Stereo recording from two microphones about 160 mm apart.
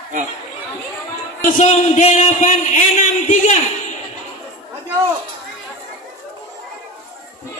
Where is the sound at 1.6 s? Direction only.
45° left (ahead or behind).